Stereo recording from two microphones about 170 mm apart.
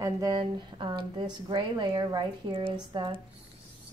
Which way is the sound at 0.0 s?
20° right (ahead or behind).